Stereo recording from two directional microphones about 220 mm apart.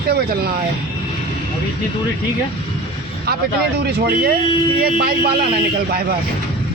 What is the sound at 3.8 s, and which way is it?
Speech, 45° right (ahead or behind).